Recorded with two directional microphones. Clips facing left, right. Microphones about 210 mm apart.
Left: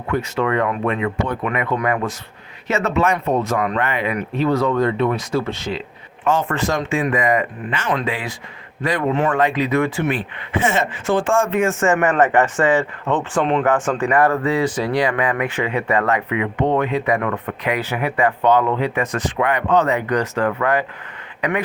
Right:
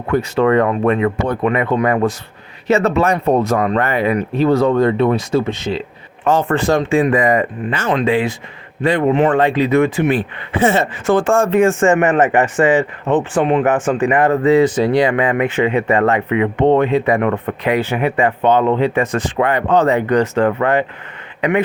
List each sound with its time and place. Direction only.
0.1 s speech: 35° right (ahead or behind); by 5.7 s 20° right (ahead or behind)
6.2 s speech: 35° right (ahead or behind)
9.3 s speech: 30° right (ahead or behind)
10.1 s speech: 35° right (ahead or behind)